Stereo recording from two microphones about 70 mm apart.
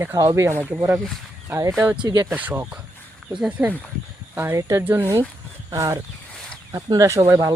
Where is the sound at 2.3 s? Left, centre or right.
Right.